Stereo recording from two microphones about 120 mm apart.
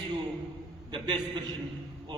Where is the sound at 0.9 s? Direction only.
40° right (ahead or behind).